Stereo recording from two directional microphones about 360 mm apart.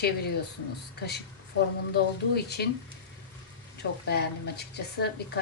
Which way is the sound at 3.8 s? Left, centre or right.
Left.